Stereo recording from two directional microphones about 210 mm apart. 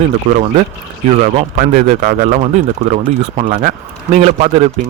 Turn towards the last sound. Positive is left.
turn(degrees=-30)  # may be behind; listen again after turning